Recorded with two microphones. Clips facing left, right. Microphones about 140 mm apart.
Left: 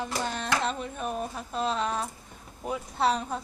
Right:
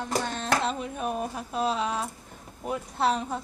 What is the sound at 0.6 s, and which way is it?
A woman's voice, 5° right (ahead or behind).